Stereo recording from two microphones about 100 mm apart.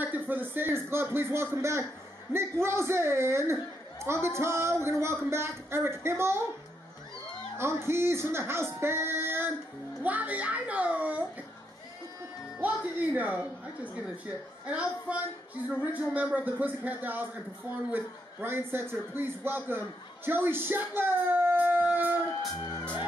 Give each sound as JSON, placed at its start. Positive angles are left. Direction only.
{"t": 0.0, "sound": "speech", "side_deg": -20}
{"t": 7.5, "sound": "a child's voice", "side_deg": -25}
{"t": 12.5, "sound": "speech", "side_deg": -15}
{"t": 14.7, "sound": "speech", "side_deg": -10}